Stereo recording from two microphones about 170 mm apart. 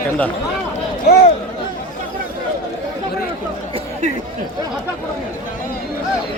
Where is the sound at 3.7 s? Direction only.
45° right (ahead or behind).